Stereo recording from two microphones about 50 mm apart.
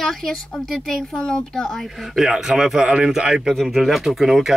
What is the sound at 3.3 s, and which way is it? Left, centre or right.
Speech, centre.